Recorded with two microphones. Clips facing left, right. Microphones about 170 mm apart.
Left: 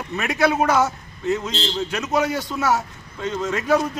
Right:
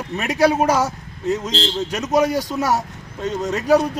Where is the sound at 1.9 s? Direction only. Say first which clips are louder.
Right 5 dB; 40° right (ahead or behind).